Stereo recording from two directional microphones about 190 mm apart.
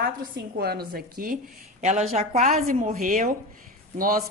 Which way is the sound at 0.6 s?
55° right (ahead or behind).